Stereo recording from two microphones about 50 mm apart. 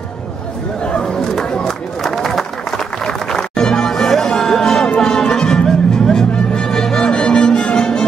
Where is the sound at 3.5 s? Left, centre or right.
Centre.